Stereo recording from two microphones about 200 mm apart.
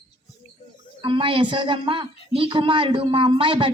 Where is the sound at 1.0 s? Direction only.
25° right (ahead or behind).